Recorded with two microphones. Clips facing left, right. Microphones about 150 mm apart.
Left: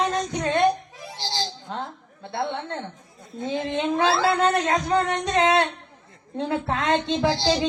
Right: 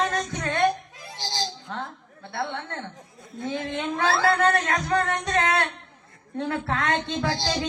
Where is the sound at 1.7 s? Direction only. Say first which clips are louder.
Left 2 dB; 20° left (ahead or behind).